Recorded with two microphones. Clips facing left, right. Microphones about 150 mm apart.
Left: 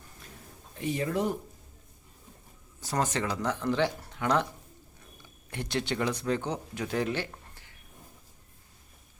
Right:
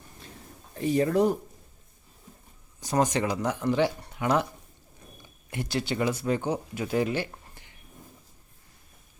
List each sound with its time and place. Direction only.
0.2 s a sound: 30° right (ahead or behind)
0.8 s speech: 40° right (ahead or behind)
2.8 s speech: 15° right (ahead or behind)
5.5 s speech: 5° right (ahead or behind)